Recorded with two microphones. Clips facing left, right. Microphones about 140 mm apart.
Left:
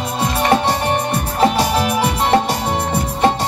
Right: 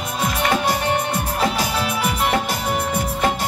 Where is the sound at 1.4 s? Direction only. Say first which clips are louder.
Left 8 dB; 30° left (ahead or behind).